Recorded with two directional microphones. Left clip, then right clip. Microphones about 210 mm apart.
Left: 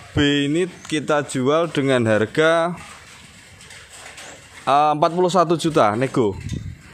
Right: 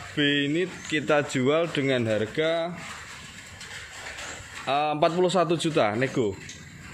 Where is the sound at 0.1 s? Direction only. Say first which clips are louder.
Left 5 dB; 30° left (ahead or behind).